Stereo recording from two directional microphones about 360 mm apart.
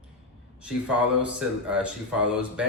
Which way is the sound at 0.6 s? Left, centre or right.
Centre.